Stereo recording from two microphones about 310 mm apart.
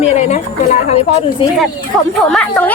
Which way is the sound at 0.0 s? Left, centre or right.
Left.